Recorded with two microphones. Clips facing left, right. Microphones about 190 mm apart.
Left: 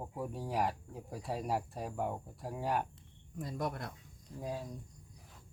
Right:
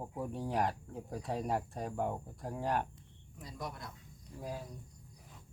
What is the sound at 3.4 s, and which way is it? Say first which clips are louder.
Speech: left 6 dB; 50° left (ahead or behind).